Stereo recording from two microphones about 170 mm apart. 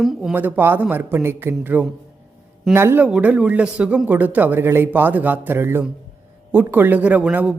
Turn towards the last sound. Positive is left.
turn(degrees=-10)  # may be behind; listen again after turning